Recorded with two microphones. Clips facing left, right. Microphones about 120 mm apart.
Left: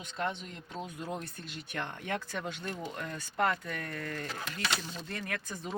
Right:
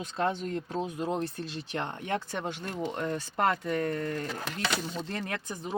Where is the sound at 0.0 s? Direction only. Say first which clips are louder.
Right 6 dB; 35° right (ahead or behind).